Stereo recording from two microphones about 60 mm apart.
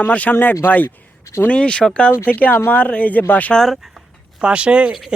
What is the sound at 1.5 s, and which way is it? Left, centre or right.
Speech, centre.